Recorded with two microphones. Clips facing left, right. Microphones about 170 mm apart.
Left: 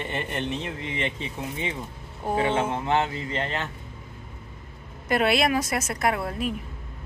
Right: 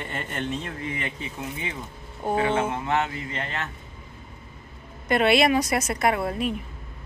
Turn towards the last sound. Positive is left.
turn(degrees=0)  # may be behind; listen again after turning